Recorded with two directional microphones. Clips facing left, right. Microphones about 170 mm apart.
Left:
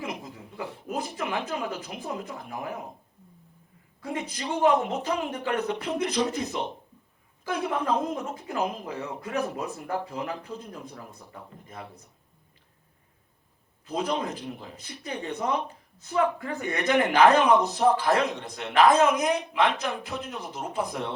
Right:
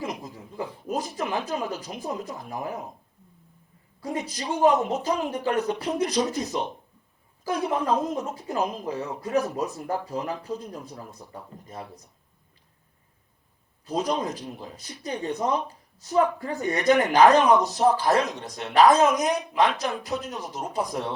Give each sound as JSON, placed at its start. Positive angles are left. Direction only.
{"t": 0.0, "sound": "a sound", "side_deg": -35}
{"t": 0.9, "sound": "speech", "side_deg": -35}
{"t": 4.0, "sound": "speech", "side_deg": -35}
{"t": 8.1, "sound": "speech", "side_deg": -35}
{"t": 13.8, "sound": "speech", "side_deg": -35}